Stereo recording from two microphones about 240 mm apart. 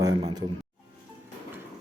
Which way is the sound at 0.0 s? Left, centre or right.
Centre.